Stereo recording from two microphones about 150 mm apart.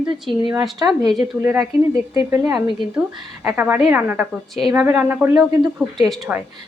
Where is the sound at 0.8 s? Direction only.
25° right (ahead or behind).